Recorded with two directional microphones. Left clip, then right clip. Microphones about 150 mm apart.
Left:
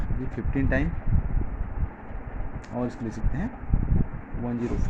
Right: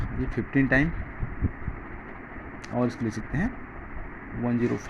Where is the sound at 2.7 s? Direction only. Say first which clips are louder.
Right 3 dB; 20° right (ahead or behind).